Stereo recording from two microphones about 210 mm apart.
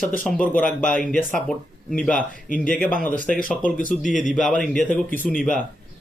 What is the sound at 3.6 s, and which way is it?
Speech, 40° left (ahead or behind).